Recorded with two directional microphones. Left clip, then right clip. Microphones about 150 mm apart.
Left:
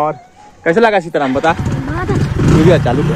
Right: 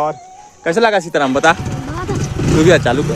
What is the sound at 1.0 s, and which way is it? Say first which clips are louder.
Speech: right 1 dB; 70° right (ahead or behind).